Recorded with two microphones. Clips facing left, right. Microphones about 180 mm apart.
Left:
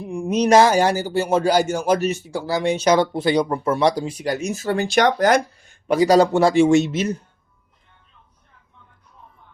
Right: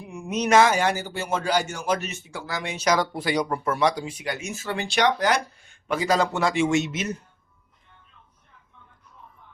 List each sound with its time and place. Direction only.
0.0 s speech: 30° left (ahead or behind)